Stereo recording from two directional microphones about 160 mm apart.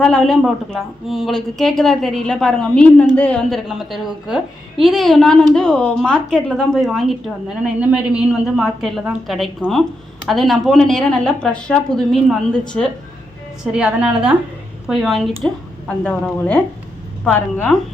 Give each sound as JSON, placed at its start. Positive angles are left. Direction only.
{"t": 0.0, "sound": "a woman's voice", "side_deg": 5}
{"t": 13.7, "sound": "a woman's voice", "side_deg": -5}